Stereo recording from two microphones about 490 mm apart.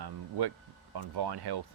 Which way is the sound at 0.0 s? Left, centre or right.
Right.